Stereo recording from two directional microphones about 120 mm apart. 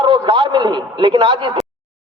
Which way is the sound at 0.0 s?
45° right (ahead or behind).